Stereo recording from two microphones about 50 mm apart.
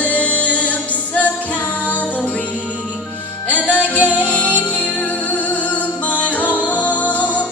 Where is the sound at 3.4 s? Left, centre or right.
Left.